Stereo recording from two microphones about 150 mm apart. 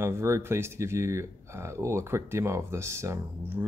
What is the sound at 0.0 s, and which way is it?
Speech, 15° right (ahead or behind).